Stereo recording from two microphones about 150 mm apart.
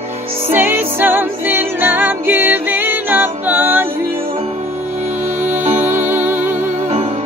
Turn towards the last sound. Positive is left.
turn(degrees=-40)  # may be behind; listen again after turning